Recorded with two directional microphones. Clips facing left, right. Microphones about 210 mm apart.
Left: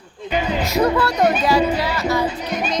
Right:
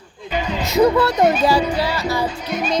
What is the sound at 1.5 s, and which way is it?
Music, 30° right (ahead or behind).